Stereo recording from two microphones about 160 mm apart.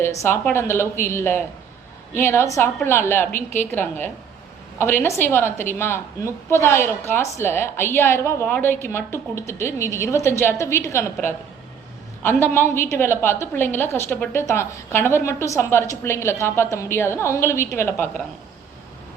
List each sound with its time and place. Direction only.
0.0 s a woman's voice: 15° left (ahead or behind)